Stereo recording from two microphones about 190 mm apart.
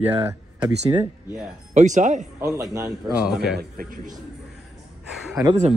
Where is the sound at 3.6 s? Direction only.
50° right (ahead or behind).